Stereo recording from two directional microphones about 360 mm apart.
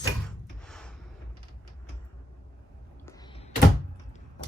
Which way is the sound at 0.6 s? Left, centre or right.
Centre.